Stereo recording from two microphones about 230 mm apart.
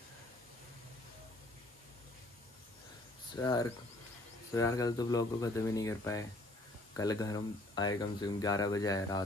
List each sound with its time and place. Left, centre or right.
3.3 s speech: centre